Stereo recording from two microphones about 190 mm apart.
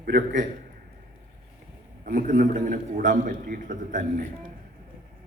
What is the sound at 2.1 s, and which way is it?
A man's voice, 45° right (ahead or behind).